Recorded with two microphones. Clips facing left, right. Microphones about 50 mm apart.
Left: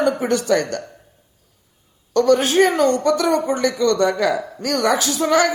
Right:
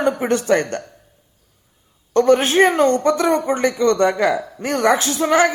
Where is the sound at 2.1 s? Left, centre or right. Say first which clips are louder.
Right 1 dB; right.